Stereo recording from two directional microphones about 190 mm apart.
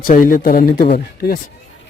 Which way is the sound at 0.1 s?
45° left (ahead or behind).